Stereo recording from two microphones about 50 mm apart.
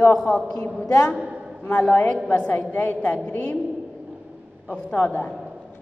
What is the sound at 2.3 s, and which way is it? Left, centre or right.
A woman's voice, left.